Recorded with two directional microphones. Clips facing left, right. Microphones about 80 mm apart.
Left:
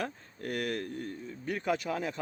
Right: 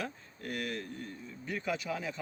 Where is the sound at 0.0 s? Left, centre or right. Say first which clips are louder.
Left 3 dB; left.